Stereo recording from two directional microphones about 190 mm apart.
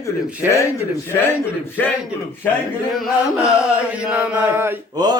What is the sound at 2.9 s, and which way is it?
Chant, centre (ahead or behind).